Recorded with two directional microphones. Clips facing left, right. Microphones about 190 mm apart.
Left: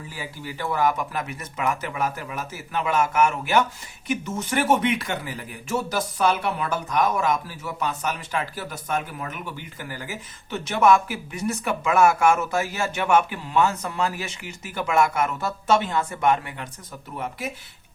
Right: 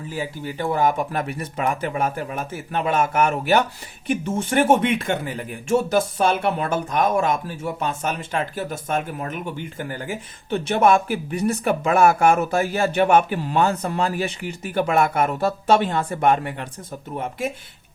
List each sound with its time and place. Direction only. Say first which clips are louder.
0.6 s speech: right 3 dB; 25° right (ahead or behind)